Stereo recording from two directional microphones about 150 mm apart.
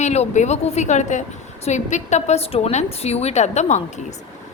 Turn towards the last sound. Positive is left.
turn(degrees=50)  # may be behind; listen again after turning